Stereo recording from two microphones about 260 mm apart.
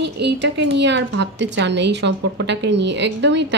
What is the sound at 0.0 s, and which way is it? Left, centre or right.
A woman's voice, right.